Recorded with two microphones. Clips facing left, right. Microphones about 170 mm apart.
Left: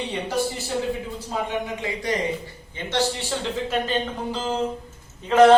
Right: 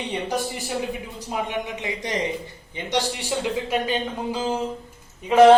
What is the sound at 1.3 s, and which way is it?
A man's voice, 20° right (ahead or behind).